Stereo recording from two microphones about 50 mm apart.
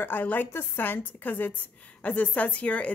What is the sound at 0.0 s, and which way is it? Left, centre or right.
A woman's voice, left.